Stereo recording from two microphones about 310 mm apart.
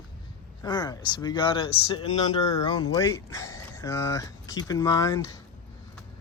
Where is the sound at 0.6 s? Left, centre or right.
Centre.